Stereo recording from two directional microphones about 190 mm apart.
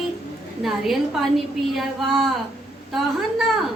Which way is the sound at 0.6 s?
Centre (ahead or behind).